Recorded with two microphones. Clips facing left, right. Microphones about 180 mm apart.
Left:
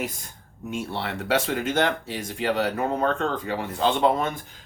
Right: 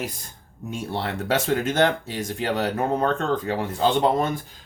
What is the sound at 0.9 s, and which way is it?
Speech, 40° right (ahead or behind).